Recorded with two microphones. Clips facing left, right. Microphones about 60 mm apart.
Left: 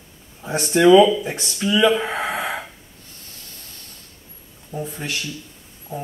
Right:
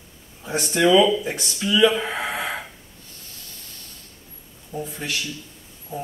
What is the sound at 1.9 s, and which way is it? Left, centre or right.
Speech, centre.